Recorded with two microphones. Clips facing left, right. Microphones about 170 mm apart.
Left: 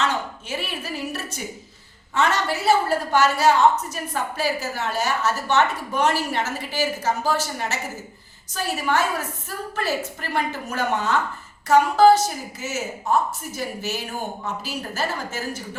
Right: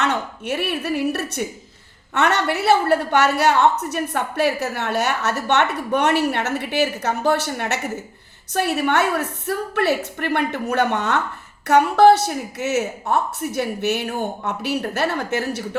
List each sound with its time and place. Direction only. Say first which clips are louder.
0.0 s a woman's voice: right 2 dB; 65° right (ahead or behind)